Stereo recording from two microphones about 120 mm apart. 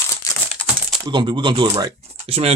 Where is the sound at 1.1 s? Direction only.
40° right (ahead or behind).